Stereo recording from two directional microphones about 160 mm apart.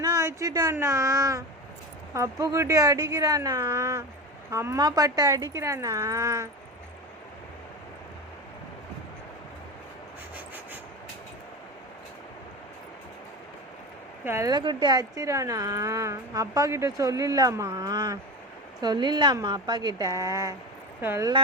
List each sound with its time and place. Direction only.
0.0 s speech: 20° right (ahead or behind)
14.3 s speech: 20° right (ahead or behind)